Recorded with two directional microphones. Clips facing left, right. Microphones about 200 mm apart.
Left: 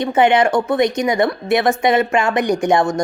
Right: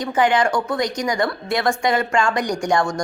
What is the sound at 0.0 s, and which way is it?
A woman's voice, 25° left (ahead or behind).